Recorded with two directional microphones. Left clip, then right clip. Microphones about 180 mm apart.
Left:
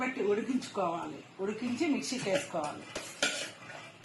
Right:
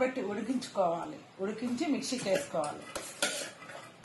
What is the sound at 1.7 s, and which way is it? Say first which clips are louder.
Speech: left 2 dB; 55° right (ahead or behind).